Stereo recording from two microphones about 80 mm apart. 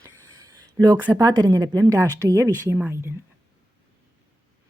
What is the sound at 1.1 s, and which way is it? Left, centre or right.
A woman's voice, right.